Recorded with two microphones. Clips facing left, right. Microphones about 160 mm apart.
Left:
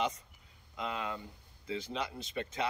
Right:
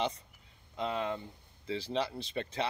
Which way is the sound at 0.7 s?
30° right (ahead or behind).